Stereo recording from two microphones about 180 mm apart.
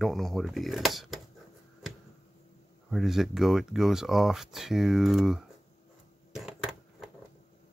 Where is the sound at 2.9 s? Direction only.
Centre (ahead or behind).